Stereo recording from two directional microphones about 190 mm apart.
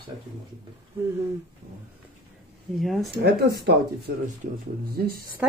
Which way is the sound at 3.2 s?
60° right (ahead or behind).